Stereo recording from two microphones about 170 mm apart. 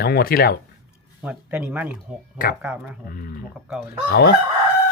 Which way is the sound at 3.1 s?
60° left (ahead or behind).